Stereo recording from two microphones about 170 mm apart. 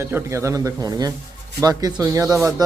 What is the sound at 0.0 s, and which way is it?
A man's voice, 15° right (ahead or behind).